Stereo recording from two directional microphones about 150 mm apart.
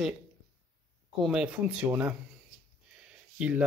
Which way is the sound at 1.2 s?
5° right (ahead or behind).